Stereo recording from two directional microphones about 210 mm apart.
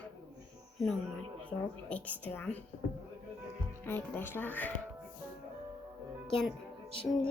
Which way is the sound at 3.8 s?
10° left (ahead or behind).